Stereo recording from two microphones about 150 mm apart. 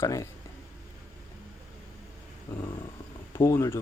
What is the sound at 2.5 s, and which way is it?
Speech, 25° left (ahead or behind).